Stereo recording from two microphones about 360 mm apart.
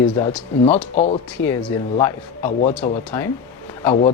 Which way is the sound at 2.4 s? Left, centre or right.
Centre.